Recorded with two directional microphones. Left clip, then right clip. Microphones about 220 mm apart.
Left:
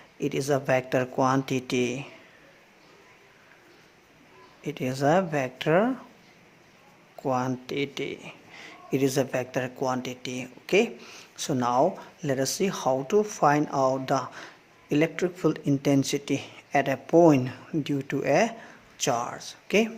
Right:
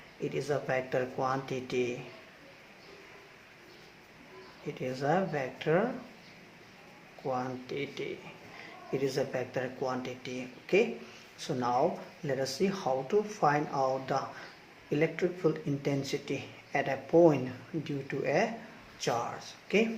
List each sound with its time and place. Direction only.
0.2 s speech: 50° left (ahead or behind)
4.6 s speech: 50° left (ahead or behind)
7.3 s speech: 50° left (ahead or behind)